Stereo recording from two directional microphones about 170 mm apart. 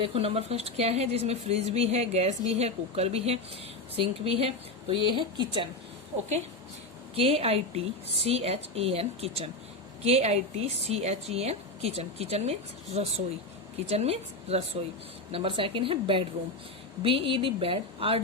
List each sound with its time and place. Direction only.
0.0 s speech: 35° right (ahead or behind)
7.2 s speech: 35° right (ahead or behind)